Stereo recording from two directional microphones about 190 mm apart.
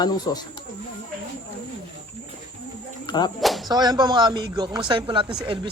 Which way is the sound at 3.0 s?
20° left (ahead or behind).